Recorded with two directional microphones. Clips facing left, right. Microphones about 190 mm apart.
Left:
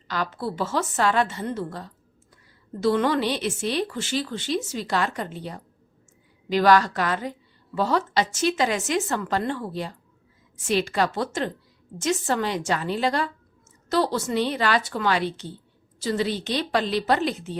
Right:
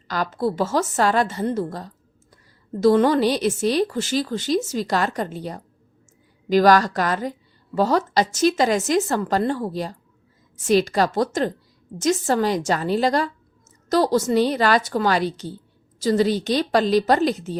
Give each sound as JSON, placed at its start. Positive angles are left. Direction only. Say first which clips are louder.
{"t": 0.1, "sound": "a woman's voice", "louder": "right 5 dB", "side_deg": -40}